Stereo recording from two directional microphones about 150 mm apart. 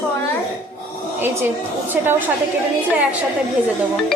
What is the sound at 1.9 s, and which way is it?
Speech, 10° right (ahead or behind).